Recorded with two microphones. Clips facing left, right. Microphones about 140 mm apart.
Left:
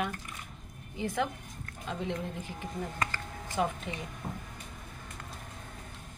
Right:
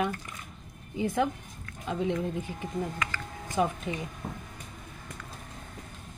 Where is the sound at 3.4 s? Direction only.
15° right (ahead or behind).